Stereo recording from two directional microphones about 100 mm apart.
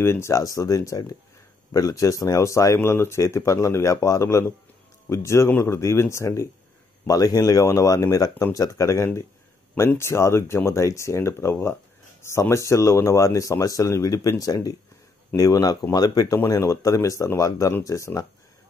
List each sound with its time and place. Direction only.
0.0 s speech: 25° left (ahead or behind)